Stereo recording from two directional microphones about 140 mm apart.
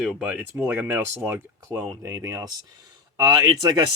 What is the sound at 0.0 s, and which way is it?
Speech, centre (ahead or behind).